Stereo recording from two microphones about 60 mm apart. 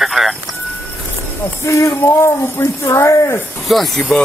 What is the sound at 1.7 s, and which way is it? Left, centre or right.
Speech, left.